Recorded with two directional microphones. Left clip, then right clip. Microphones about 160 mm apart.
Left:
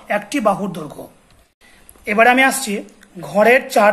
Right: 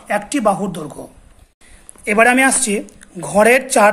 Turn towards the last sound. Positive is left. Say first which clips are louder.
# right 1 dB
turn(degrees=-35)  # may be behind; listen again after turning